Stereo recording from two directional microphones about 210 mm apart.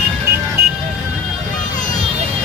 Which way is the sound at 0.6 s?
45° right (ahead or behind).